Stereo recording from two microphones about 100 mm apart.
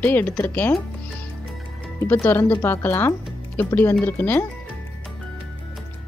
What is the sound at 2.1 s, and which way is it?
Speech, 25° left (ahead or behind).